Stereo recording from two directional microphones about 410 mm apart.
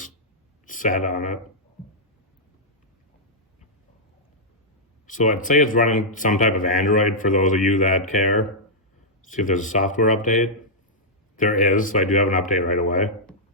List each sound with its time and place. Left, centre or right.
0.6 s speech: centre
5.0 s speech: centre
9.3 s speech: centre